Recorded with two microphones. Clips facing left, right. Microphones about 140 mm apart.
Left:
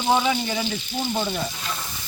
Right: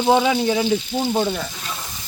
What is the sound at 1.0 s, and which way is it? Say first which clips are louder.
Sizzle: right 4 dB; 45° right (ahead or behind).